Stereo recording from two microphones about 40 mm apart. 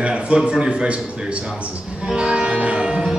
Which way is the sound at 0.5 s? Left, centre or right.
Right.